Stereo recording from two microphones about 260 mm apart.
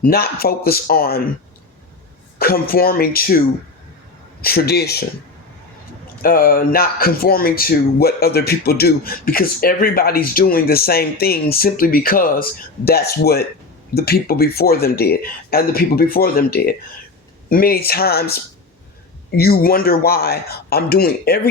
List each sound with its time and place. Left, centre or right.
0.0 s speech: left
2.4 s speech: left
4.4 s speech: left
6.2 s speech: left
19.4 s speech: left